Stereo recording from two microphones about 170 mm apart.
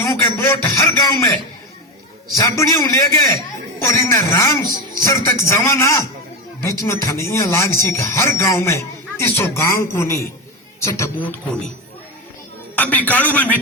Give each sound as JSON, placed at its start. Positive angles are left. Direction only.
{"t": 0.0, "sound": "speech", "side_deg": 15}
{"t": 2.3, "sound": "a man's voice", "side_deg": 20}
{"t": 12.7, "sound": "speech", "side_deg": 10}